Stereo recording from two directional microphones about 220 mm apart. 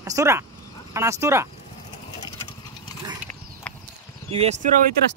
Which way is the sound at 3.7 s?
5° left (ahead or behind).